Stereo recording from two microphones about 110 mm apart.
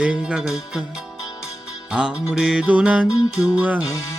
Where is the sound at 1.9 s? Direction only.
10° right (ahead or behind).